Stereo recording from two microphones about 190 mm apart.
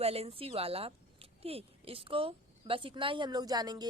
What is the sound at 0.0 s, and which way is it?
A woman's voice, 30° right (ahead or behind).